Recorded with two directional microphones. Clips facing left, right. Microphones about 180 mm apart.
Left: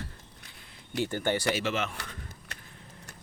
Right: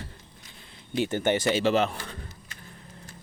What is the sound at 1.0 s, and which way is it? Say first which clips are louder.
Speech: right 4 dB; 20° right (ahead or behind).